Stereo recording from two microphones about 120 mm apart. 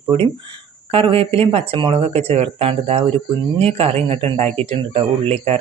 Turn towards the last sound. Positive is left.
turn(degrees=-55)  # may be behind; listen again after turning